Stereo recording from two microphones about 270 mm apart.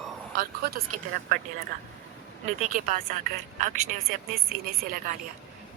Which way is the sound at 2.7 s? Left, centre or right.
Right.